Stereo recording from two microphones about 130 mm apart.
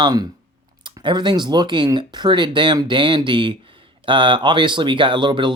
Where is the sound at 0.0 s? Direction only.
30° right (ahead or behind).